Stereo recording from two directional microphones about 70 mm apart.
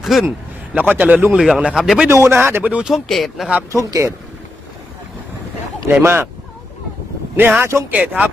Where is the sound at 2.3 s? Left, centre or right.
Right.